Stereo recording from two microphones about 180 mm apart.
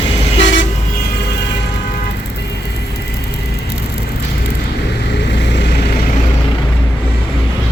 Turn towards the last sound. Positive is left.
turn(degrees=70)  # may be behind; listen again after turning